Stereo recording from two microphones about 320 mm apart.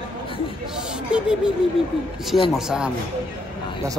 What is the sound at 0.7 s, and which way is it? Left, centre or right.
Chatter, centre.